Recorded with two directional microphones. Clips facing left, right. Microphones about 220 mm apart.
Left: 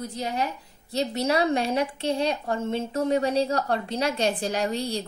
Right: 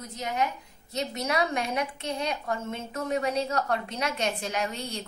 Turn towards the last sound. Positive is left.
turn(degrees=35)  # may be behind; listen again after turning